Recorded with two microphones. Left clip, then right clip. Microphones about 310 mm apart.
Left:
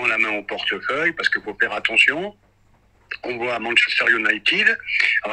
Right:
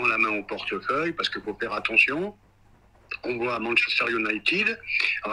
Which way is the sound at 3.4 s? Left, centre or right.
Centre.